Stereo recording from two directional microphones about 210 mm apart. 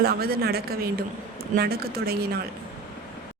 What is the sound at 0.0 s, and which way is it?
A woman's voice, 45° right (ahead or behind).